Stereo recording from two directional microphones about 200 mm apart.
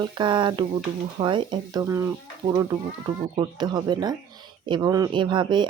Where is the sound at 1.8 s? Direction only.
10° right (ahead or behind).